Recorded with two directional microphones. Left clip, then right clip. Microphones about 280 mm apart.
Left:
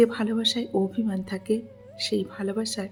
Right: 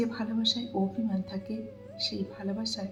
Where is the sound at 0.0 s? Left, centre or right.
Left.